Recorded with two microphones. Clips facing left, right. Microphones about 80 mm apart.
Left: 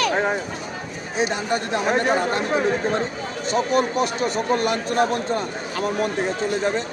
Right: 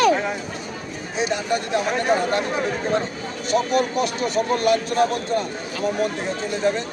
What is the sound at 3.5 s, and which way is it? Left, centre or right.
Speech, left.